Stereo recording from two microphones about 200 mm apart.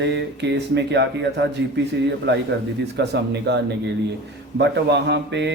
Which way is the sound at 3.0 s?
55° right (ahead or behind).